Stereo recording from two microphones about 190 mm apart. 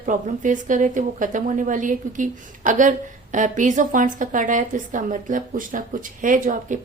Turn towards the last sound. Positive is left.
turn(degrees=-45)  # may be behind; listen again after turning